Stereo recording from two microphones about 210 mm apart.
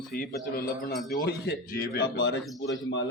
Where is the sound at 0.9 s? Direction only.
Centre (ahead or behind).